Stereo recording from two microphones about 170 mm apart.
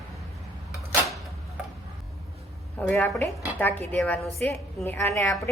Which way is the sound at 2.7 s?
10° left (ahead or behind).